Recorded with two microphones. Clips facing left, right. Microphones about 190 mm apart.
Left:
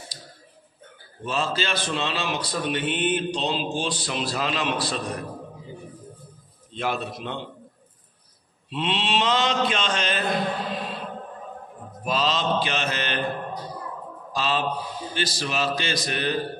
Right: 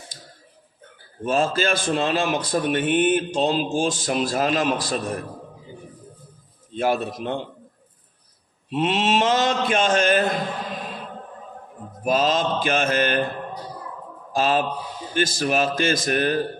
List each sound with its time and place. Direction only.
1.2 s a man's voice: 50° right (ahead or behind)
6.8 s a man's voice: 45° right (ahead or behind)
8.6 s a man's voice: 45° right (ahead or behind)
12.0 s a man's voice: 50° right (ahead or behind)
14.3 s a man's voice: 50° right (ahead or behind)